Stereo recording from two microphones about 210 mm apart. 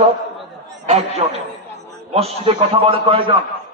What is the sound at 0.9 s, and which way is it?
A man's voice, 30° right (ahead or behind).